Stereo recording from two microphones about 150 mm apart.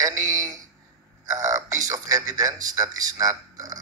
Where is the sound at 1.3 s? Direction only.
20° right (ahead or behind).